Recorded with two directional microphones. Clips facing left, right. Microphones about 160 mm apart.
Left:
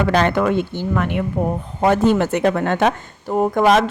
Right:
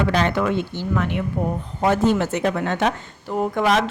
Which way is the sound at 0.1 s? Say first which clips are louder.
Left 4 dB; 55° left (ahead or behind).